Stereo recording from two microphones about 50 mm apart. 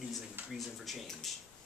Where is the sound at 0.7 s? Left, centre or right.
Centre.